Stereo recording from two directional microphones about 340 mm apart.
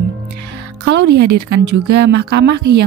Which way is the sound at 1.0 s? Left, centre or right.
Right.